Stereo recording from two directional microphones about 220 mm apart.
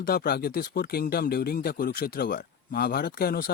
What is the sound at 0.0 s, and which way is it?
Speech, 45° left (ahead or behind).